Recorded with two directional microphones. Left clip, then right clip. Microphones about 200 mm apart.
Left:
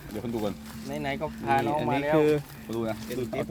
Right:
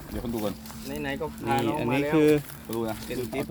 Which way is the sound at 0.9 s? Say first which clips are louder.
Left 1 dB; 50° left (ahead or behind).